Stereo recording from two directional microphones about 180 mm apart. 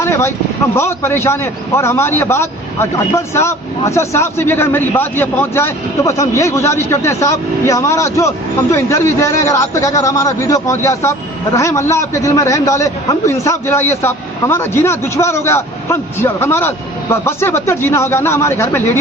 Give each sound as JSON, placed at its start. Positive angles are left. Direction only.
{"t": 0.0, "sound": "a man's voice", "side_deg": 15}